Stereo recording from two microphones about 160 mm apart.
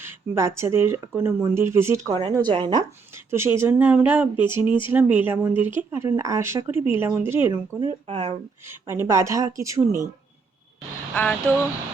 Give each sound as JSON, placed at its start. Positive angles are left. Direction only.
{"t": 0.0, "sound": "speech", "side_deg": -15}
{"t": 2.3, "sound": "speech", "side_deg": -30}
{"t": 3.2, "sound": "speech", "side_deg": -15}
{"t": 7.8, "sound": "speech", "side_deg": -25}
{"t": 8.1, "sound": "speech", "side_deg": -40}
{"t": 8.6, "sound": "speech", "side_deg": -15}
{"t": 11.1, "sound": "speech", "side_deg": 10}